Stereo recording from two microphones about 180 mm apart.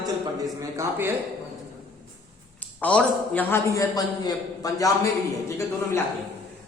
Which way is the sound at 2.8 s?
5° left (ahead or behind).